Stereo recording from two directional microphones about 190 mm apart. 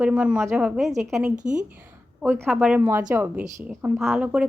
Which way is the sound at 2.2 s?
10° right (ahead or behind).